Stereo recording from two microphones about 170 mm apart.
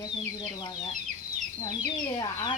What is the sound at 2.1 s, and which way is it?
Speech, 25° left (ahead or behind).